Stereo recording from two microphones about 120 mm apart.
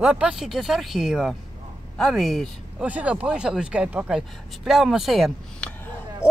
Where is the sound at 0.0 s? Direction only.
10° right (ahead or behind).